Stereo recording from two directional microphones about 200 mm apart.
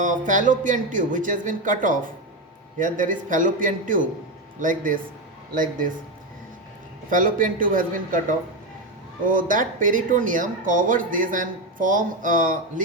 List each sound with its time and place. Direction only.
0.3 s speech: 40° right (ahead or behind)
7.1 s speech: 40° right (ahead or behind)